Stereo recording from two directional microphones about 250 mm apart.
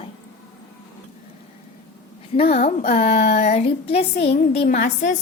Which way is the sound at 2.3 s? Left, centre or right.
Left.